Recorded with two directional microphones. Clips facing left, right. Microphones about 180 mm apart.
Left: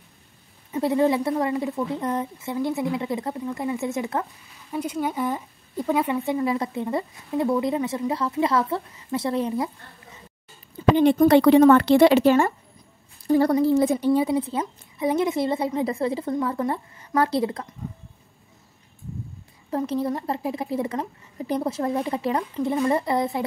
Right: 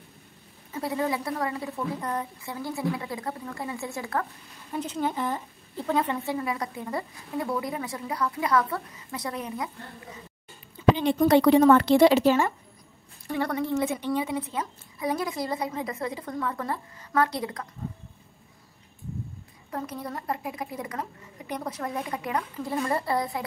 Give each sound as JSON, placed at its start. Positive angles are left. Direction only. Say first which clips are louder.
{"t": 0.7, "sound": "a woman's voice", "louder": "left 8 dB", "side_deg": 25}
{"t": 4.7, "sound": "a woman's voice", "louder": "left 3 dB", "side_deg": 10}
{"t": 6.2, "sound": "a woman's voice", "louder": "left 6 dB", "side_deg": 25}
{"t": 11.0, "sound": "a woman's voice", "louder": "left 8 dB", "side_deg": 55}
{"t": 13.3, "sound": "a woman's voice", "louder": "left 9 dB", "side_deg": 35}
{"t": 19.7, "sound": "a woman's voice", "louder": "left 9 dB", "side_deg": 30}